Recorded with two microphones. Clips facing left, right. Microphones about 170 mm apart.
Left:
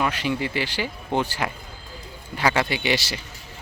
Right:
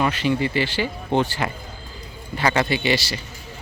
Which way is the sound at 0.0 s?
10° left (ahead or behind).